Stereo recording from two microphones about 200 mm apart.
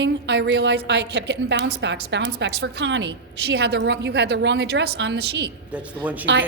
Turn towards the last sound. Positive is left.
turn(degrees=-10)  # may be behind; listen again after turning